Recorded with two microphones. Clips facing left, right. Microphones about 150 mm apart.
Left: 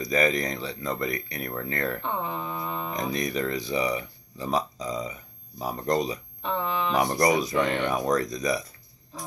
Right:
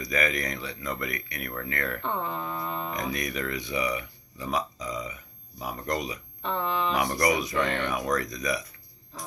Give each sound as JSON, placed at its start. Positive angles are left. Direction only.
{"t": 0.0, "sound": "speech", "side_deg": 30}
{"t": 2.0, "sound": "mantra", "side_deg": 10}
{"t": 2.9, "sound": "speech", "side_deg": 30}
{"t": 6.4, "sound": "speech", "side_deg": 5}
{"t": 7.0, "sound": "speech", "side_deg": 30}
{"t": 7.5, "sound": "speech", "side_deg": 10}
{"t": 7.9, "sound": "speech", "side_deg": 30}